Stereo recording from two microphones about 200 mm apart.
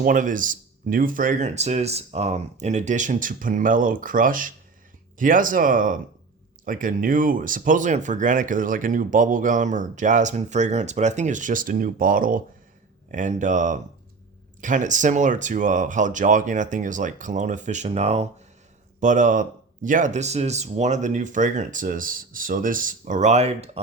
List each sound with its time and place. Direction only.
0.0 s speech: 40° right (ahead or behind)